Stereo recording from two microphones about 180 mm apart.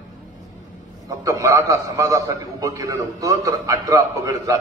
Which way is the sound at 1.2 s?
20° right (ahead or behind).